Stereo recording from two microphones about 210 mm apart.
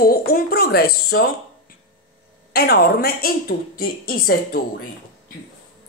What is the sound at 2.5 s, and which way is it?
Speech, 45° left (ahead or behind).